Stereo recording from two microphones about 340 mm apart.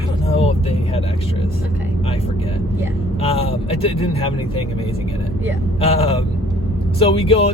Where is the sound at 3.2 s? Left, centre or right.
Centre.